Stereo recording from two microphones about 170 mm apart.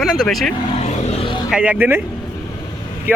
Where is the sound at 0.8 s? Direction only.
40° left (ahead or behind).